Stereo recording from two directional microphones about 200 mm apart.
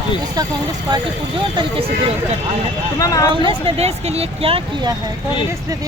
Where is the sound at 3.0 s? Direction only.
15° left (ahead or behind).